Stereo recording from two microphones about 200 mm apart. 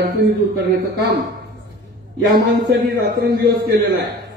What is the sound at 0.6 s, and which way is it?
Speech, 55° right (ahead or behind).